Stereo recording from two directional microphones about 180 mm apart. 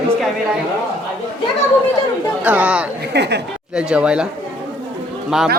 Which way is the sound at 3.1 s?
70° right (ahead or behind).